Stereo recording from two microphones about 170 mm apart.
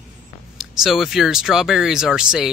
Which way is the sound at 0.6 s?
Centre (ahead or behind).